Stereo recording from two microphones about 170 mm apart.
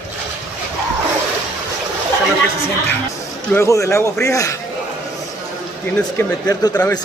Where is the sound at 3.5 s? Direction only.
15° left (ahead or behind).